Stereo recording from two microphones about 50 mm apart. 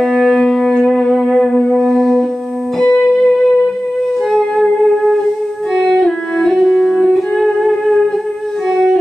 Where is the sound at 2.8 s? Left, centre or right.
Centre.